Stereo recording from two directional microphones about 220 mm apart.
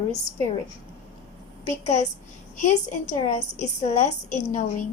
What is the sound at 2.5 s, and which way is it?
A woman's voice, 35° left (ahead or behind).